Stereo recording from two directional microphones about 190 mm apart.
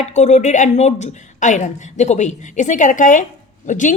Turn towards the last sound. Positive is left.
turn(degrees=40)  # may be behind; listen again after turning